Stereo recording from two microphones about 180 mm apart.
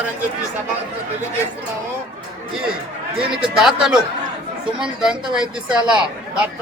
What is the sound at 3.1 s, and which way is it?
Speech, 5° right (ahead or behind).